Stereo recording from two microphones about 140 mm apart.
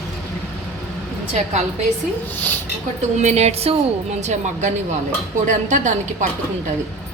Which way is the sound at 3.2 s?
55° right (ahead or behind).